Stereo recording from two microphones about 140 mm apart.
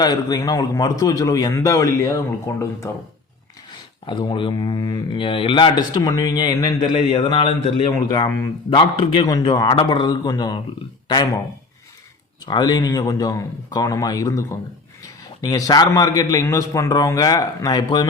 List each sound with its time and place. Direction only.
0.0 s a man's voice: 30° left (ahead or behind)
3.7 s speech: 35° left (ahead or behind)
8.3 s a man's voice: 20° left (ahead or behind)
8.7 s speech: 40° left (ahead or behind)
12.5 s a man's voice: 30° left (ahead or behind)